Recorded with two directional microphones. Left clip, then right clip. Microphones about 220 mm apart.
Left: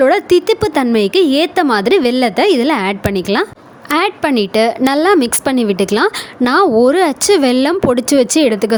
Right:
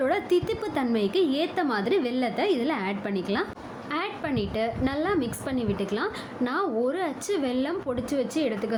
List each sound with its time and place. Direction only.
0.0 s speech: 45° left (ahead or behind)